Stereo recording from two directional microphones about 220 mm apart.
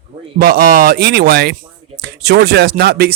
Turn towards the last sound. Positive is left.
turn(degrees=-45)  # may be behind; listen again after turning